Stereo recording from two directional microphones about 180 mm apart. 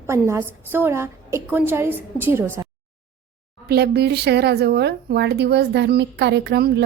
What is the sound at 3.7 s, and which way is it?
A woman's voice, 65° right (ahead or behind).